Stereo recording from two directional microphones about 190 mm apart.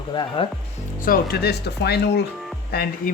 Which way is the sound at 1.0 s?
50° left (ahead or behind).